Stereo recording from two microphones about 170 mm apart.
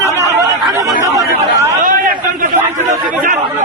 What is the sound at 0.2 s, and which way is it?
Chatter, 20° right (ahead or behind).